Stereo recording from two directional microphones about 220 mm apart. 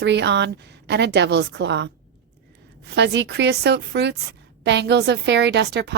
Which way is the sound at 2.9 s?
50° right (ahead or behind).